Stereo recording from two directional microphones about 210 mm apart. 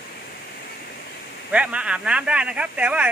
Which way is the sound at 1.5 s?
5° right (ahead or behind).